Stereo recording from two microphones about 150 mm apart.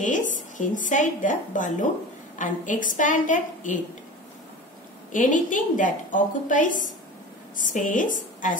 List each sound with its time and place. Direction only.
0.0 s a woman's voice: 60° left (ahead or behind)
5.1 s a woman's voice: 60° left (ahead or behind)